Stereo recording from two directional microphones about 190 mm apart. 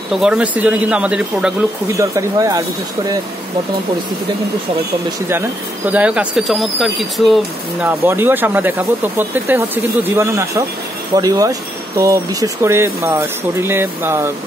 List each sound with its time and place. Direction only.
0.1 s speech: 5° right (ahead or behind)
2.0 s speech: 15° right (ahead or behind)
5.9 s speech: 5° right (ahead or behind)
7.8 s speech: 10° right (ahead or behind)